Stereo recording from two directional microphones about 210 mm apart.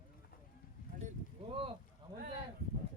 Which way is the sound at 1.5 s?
25° right (ahead or behind).